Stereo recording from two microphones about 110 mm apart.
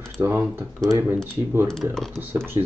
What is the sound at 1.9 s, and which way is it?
Speech, 5° left (ahead or behind).